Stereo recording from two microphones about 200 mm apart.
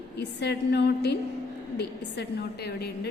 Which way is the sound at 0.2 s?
55° left (ahead or behind).